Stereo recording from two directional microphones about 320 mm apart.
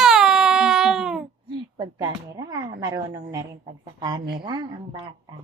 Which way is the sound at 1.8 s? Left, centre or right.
Centre.